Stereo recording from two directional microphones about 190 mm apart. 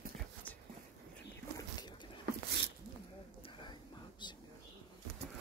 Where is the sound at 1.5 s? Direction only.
20° left (ahead or behind).